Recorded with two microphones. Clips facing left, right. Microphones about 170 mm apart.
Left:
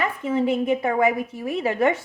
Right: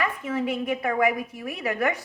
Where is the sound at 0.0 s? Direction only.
30° left (ahead or behind).